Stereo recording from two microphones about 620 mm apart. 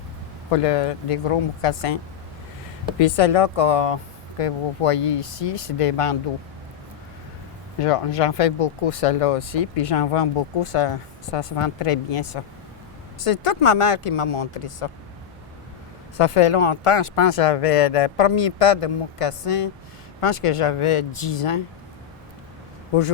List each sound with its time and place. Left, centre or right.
0.5 s speech: left
3.0 s speech: left
7.8 s speech: left
16.1 s speech: left